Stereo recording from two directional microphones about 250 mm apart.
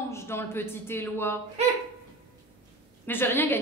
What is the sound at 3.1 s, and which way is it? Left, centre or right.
Speech, centre.